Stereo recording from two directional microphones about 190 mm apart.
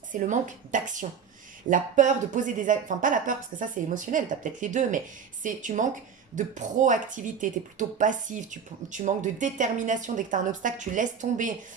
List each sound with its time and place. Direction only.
0.1 s speech: 40° right (ahead or behind)